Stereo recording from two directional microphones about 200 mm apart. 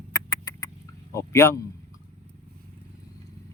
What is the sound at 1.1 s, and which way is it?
Speech, 15° left (ahead or behind).